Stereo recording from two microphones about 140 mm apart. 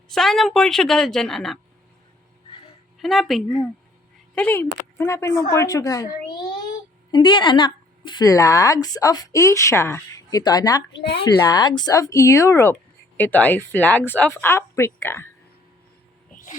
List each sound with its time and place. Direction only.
0.1 s a woman's voice: centre (ahead or behind)
3.0 s a woman's voice: centre (ahead or behind)
4.4 s a woman's voice: 15° left (ahead or behind)